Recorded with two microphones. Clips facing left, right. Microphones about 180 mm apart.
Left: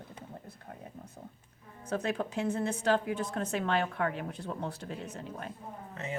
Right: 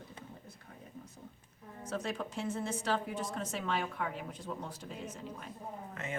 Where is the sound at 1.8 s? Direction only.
60° left (ahead or behind).